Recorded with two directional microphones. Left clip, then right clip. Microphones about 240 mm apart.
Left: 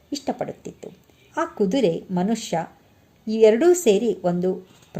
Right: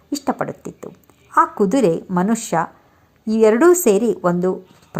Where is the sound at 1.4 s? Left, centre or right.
Centre.